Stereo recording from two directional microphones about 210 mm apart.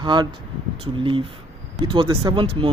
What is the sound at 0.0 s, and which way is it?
Speech, 20° right (ahead or behind).